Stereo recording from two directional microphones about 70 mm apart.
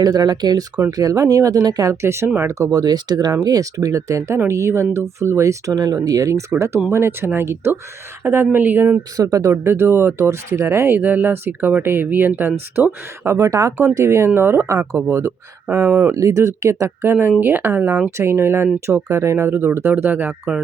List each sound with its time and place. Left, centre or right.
0.0 s speech: right
1.9 s speech: right
2.7 s speech: right
3.4 s speech: right
6.1 s speech: right
6.9 s speech: right
9.1 s speech: right
9.6 s speech: right
13.3 s speech: right
14.3 s speech: right
16.1 s speech: right
17.1 s speech: right
18.2 s speech: right